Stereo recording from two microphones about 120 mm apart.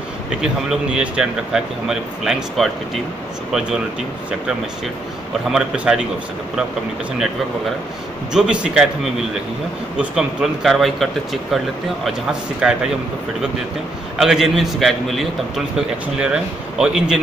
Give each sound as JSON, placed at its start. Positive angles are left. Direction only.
{"t": 0.4, "sound": "speech", "side_deg": -5}
{"t": 5.5, "sound": "speech", "side_deg": -5}
{"t": 8.3, "sound": "speech", "side_deg": -5}
{"t": 14.1, "sound": "a man's voice", "side_deg": -5}